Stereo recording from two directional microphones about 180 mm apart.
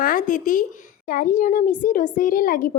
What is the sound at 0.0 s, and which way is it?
Speech, 50° left (ahead or behind).